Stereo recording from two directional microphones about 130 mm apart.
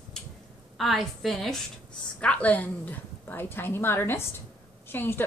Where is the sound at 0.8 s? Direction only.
Centre (ahead or behind).